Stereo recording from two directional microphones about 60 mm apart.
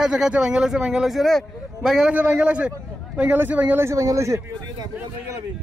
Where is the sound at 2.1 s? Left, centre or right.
Right.